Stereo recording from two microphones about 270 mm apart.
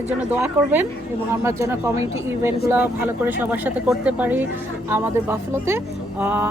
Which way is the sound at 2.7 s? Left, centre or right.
Centre.